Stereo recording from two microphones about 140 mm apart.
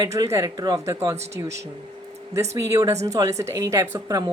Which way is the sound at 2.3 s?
20° right (ahead or behind).